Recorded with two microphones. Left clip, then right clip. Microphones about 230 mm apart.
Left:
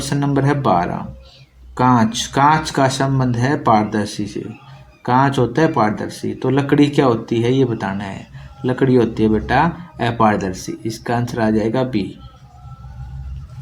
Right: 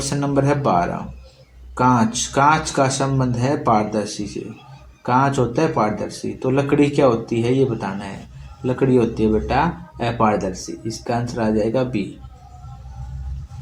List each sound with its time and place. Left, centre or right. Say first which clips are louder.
0.0 s speech: left 1 dB; left